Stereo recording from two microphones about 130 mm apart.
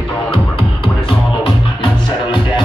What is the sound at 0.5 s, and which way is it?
Music, 45° left (ahead or behind).